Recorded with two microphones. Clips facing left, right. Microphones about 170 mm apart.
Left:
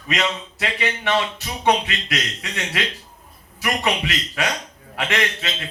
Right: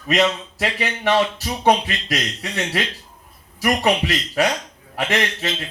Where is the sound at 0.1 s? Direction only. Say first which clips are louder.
Right 5 dB; 40° right (ahead or behind).